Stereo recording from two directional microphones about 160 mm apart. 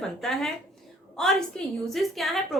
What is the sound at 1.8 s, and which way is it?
Speech, centre (ahead or behind).